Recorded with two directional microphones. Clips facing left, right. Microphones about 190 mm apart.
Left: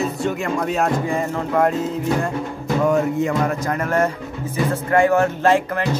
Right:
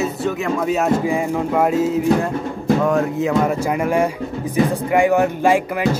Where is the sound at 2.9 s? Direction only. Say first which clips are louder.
Even; centre (ahead or behind).